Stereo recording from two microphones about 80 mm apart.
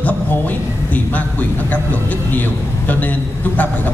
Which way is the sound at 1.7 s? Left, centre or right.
Left.